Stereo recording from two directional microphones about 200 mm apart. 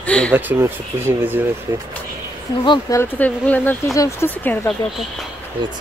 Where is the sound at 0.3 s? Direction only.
10° right (ahead or behind).